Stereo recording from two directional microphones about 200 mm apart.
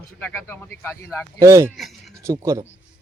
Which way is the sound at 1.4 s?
15° right (ahead or behind).